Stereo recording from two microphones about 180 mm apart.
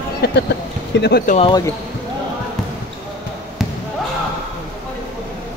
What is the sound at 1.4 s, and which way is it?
Speech, 25° left (ahead or behind).